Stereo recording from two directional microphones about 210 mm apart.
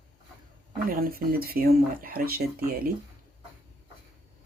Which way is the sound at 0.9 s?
45° right (ahead or behind).